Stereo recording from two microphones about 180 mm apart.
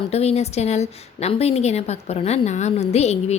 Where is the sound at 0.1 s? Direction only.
35° left (ahead or behind).